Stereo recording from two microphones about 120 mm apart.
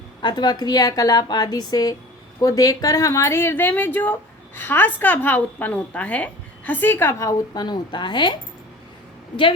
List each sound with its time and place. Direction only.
0.2 s a woman's voice: 35° left (ahead or behind)